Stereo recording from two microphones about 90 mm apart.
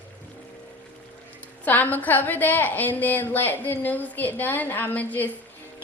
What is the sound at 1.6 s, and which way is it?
A woman's voice, 20° left (ahead or behind).